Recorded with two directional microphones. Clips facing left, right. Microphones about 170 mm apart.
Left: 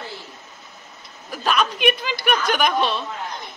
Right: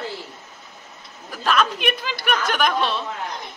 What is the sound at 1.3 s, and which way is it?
Speech, 5° left (ahead or behind).